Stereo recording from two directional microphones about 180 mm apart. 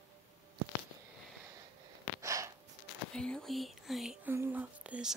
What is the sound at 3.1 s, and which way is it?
Whispering, 5° left (ahead or behind).